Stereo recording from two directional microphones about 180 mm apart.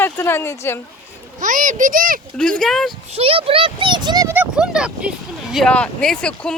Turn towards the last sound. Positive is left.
turn(degrees=5)  # may be behind; listen again after turning